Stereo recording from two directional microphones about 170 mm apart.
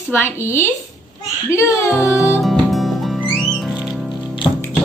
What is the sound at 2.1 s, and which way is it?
Music, 15° left (ahead or behind).